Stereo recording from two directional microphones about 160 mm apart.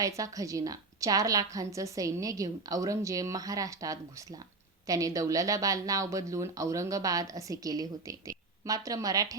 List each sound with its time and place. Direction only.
0.0 s speech: 20° right (ahead or behind)